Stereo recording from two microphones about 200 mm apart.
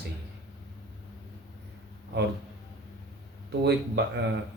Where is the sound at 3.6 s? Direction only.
60° right (ahead or behind).